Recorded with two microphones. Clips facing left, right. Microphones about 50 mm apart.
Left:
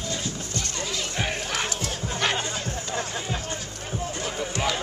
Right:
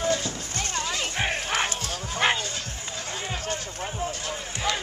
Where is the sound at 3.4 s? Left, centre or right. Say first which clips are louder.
Right 2 dB; right.